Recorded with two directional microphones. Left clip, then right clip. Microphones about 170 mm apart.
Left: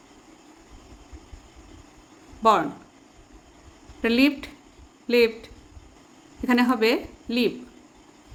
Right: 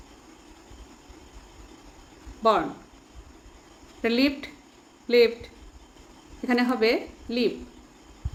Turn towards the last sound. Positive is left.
turn(degrees=45)  # may be behind; listen again after turning